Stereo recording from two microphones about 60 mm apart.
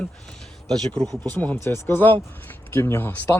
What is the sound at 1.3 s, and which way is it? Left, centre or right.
Speech, left.